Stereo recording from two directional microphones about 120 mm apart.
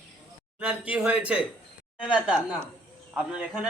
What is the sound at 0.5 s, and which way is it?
Speech, 10° right (ahead or behind).